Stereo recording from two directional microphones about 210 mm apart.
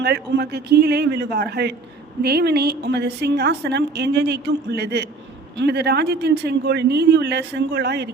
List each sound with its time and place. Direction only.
0.0 s a woman's voice: 50° right (ahead or behind)